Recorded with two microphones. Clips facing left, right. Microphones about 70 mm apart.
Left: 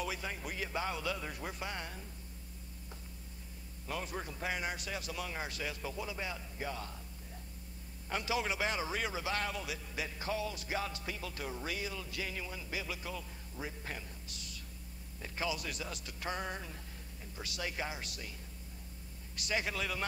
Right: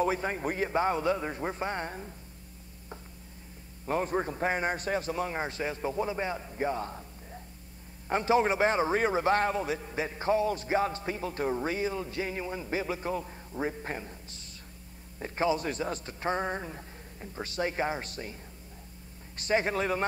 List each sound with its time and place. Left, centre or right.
0.0 s a man's voice: right
3.8 s a man's voice: right
8.1 s a man's voice: right
19.3 s a man's voice: right